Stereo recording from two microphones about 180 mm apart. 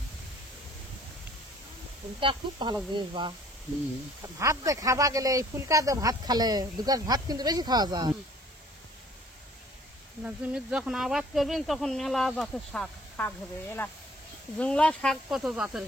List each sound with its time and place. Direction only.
2.1 s speech: 25° right (ahead or behind)
4.4 s speech: 20° right (ahead or behind)
10.2 s speech: 5° right (ahead or behind)
14.6 s speech: 5° left (ahead or behind)